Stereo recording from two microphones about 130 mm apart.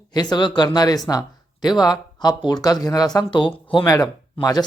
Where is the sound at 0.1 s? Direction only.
35° left (ahead or behind).